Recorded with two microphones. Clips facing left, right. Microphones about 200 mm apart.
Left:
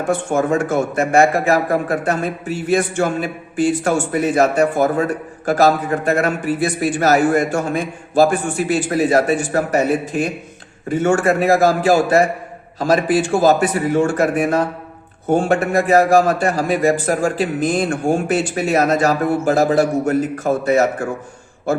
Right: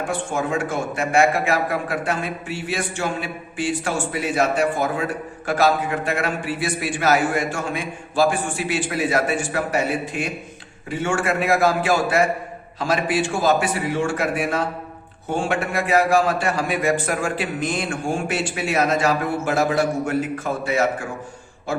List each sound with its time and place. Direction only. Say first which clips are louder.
0.3 s a man's voice: left 7 dB; 45° left (ahead or behind)